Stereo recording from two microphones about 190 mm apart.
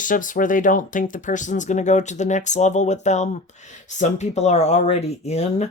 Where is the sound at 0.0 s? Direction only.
45° left (ahead or behind).